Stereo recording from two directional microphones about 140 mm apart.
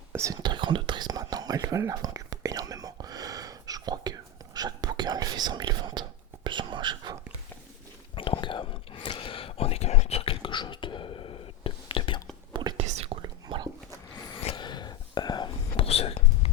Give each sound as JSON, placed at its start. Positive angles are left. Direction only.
{"t": 0.1, "sound": "whispering", "side_deg": -20}
{"t": 8.1, "sound": "whispering", "side_deg": 40}
{"t": 12.7, "sound": "whispering", "side_deg": -45}
{"t": 13.2, "sound": "whispering", "side_deg": -30}
{"t": 14.5, "sound": "whispering", "side_deg": 30}